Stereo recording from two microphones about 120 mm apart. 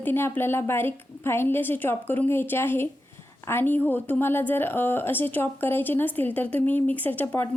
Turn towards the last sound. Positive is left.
turn(degrees=15)  # may be behind; listen again after turning